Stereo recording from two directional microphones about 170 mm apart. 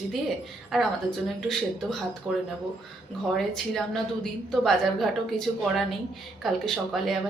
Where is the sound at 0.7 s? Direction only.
Centre (ahead or behind).